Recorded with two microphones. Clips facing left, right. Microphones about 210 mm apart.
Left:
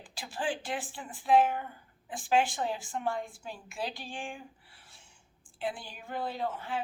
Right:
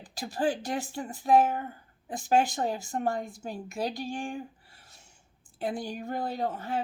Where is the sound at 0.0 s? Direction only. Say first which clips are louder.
Right 6 dB; 40° right (ahead or behind).